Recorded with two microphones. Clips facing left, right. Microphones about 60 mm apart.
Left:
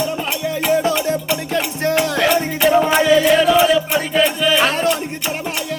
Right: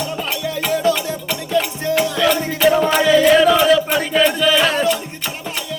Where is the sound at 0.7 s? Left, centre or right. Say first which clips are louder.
Left 1 dB; left.